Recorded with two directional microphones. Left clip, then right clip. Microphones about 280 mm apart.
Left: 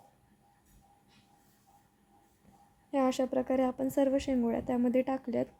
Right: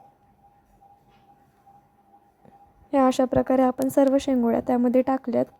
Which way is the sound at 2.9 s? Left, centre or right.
Right.